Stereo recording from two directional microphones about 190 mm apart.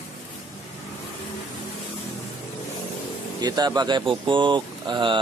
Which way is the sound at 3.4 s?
20° right (ahead or behind).